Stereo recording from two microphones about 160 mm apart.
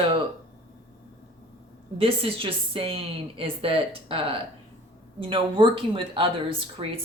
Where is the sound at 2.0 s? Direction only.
35° right (ahead or behind).